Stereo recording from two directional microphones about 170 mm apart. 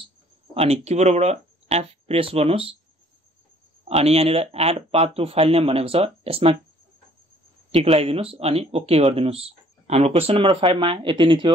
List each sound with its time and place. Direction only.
0.6 s speech: 40° right (ahead or behind)
3.9 s speech: 35° right (ahead or behind)
7.7 s speech: 35° right (ahead or behind)